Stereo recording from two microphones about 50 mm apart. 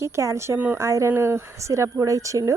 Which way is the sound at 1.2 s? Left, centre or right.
Right.